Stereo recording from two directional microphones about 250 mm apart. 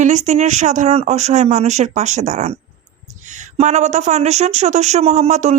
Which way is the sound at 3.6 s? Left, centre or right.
Right.